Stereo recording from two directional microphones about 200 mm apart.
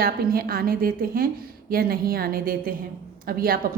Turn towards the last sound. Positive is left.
turn(degrees=-45)  # may be behind; listen again after turning